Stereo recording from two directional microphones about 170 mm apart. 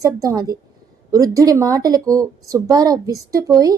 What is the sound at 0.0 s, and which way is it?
A woman's voice, 20° right (ahead or behind).